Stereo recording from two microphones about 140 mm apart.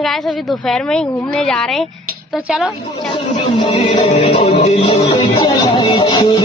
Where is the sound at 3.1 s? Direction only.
45° left (ahead or behind).